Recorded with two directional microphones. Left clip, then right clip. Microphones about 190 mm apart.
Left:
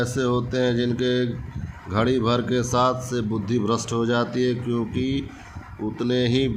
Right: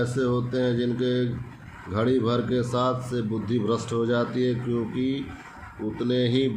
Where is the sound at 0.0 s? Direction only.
45° left (ahead or behind).